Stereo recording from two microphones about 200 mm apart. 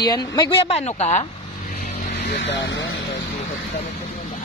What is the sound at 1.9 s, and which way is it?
Vehicle, 35° left (ahead or behind).